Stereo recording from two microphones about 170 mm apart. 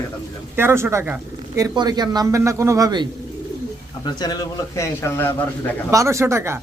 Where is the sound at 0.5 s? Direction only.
15° right (ahead or behind).